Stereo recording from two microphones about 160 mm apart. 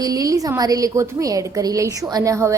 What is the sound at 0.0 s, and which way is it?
A woman's voice, 20° right (ahead or behind).